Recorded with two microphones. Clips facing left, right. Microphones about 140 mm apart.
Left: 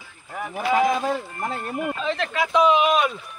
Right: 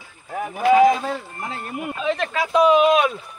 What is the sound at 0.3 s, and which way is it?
Speech, 45° right (ahead or behind).